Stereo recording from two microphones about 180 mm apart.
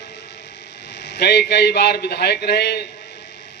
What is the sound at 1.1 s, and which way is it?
A man's voice, 65° left (ahead or behind).